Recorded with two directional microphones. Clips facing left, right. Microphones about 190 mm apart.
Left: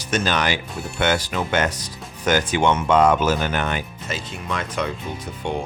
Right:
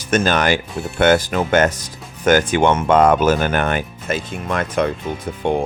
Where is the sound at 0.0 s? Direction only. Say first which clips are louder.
Right 5 dB; 50° right (ahead or behind).